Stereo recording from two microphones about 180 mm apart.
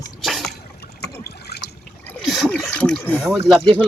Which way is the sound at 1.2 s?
60° left (ahead or behind).